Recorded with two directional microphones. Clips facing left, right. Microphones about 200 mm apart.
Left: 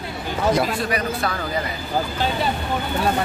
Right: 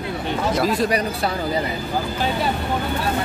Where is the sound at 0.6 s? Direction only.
35° right (ahead or behind).